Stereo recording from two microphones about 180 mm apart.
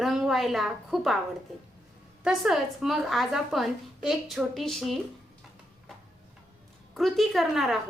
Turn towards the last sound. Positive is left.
turn(degrees=0)  # may be behind; listen again after turning